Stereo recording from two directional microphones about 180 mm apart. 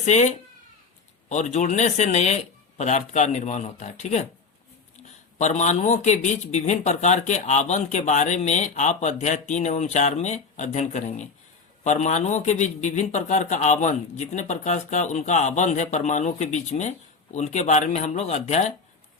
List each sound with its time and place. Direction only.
0.0 s a man's voice: 40° left (ahead or behind)
5.4 s a man's voice: 40° left (ahead or behind)